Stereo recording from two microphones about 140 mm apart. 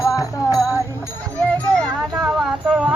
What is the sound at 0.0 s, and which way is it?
Music, 25° left (ahead or behind).